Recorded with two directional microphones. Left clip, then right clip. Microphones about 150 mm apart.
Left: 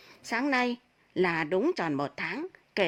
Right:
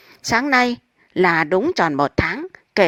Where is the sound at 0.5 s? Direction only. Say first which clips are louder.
Right 12 dB; 35° right (ahead or behind).